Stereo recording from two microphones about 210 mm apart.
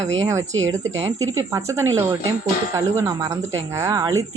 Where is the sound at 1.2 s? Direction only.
15° right (ahead or behind).